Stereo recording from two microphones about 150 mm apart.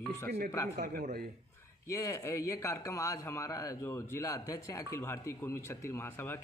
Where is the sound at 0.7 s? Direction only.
90° right.